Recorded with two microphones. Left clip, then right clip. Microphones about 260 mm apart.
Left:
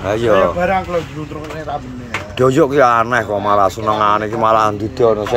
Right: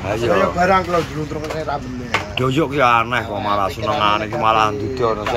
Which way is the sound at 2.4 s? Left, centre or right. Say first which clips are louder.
Left 7 dB; left.